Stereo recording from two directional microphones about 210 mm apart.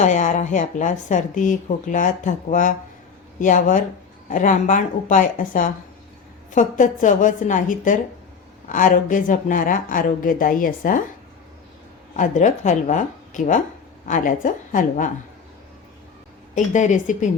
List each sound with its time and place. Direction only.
0.0 s speech: 35° left (ahead or behind)
12.1 s speech: 35° left (ahead or behind)
16.7 s speech: 35° left (ahead or behind)